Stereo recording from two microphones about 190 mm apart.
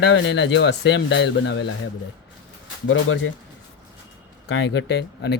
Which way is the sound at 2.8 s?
90° left.